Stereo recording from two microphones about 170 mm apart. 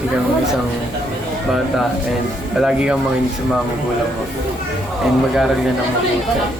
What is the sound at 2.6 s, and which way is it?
Speech, 5° right (ahead or behind).